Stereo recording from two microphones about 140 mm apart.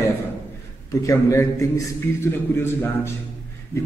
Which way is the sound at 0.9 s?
25° left (ahead or behind).